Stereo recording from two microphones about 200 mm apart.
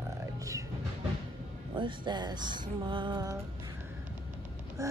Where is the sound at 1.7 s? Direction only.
25° right (ahead or behind).